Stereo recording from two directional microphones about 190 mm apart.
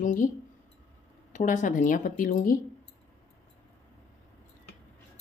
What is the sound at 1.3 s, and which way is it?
Speech, 40° left (ahead or behind).